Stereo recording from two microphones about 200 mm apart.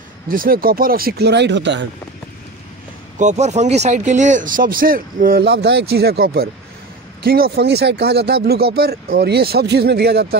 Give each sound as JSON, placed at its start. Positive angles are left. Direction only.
{"t": 0.3, "sound": "speech", "side_deg": -45}
{"t": 3.2, "sound": "speech", "side_deg": -35}